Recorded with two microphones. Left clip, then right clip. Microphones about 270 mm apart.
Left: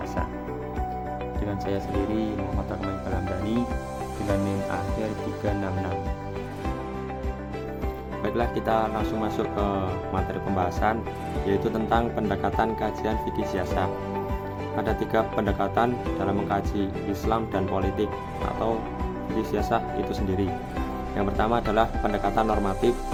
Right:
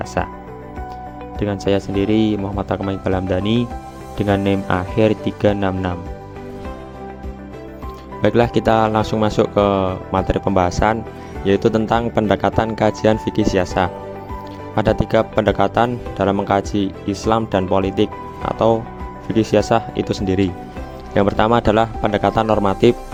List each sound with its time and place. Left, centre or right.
0.0 s speech: right
1.4 s speech: right
8.2 s speech: right
19.4 s speech: right